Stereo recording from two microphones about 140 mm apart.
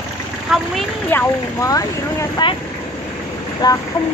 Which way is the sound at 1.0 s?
15° left (ahead or behind).